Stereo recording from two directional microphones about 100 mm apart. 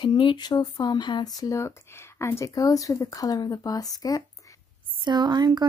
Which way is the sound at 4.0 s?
35° left (ahead or behind).